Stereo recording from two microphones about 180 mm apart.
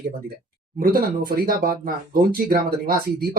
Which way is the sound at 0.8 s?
55° right (ahead or behind).